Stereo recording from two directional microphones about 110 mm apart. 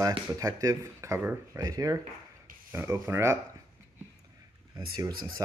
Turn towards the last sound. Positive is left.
turn(degrees=-40)  # may be behind; listen again after turning